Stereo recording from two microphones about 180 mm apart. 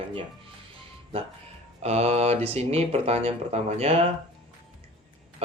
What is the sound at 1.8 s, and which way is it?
Speech, 35° right (ahead or behind).